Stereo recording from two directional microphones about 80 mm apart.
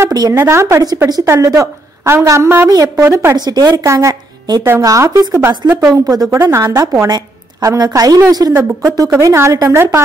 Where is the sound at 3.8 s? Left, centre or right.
Right.